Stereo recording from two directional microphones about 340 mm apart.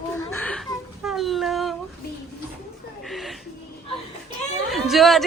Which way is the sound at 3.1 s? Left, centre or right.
Centre.